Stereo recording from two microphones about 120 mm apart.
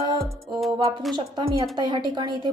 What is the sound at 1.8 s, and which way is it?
Speech, 35° right (ahead or behind).